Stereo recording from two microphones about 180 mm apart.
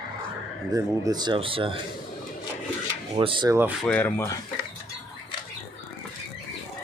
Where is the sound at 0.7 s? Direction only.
20° right (ahead or behind).